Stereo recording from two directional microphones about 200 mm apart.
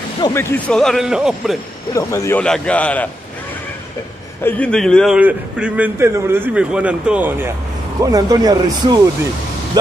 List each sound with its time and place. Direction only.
0.2 s a man's voice: 10° left (ahead or behind)
2.0 s a man's voice: 15° left (ahead or behind)
4.5 s a man's voice: 5° left (ahead or behind); by 9.0 s 20° right (ahead or behind)